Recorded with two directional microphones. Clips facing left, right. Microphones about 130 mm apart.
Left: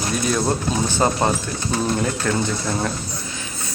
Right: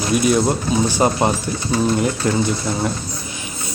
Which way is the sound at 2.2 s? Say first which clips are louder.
Right 2 dB; 15° right (ahead or behind).